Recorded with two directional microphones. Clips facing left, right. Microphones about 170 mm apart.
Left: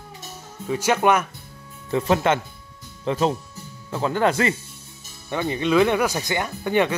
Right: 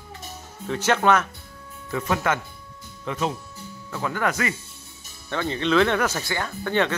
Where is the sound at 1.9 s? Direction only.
30° left (ahead or behind).